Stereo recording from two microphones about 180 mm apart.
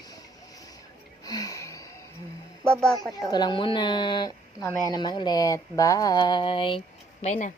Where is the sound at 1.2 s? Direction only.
20° left (ahead or behind).